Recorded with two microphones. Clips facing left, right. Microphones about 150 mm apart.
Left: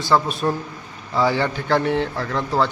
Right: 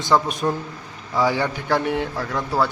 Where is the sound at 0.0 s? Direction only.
15° right (ahead or behind).